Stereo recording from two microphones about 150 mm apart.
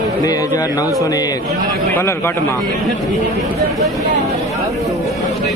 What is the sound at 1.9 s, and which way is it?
Speech, 15° left (ahead or behind).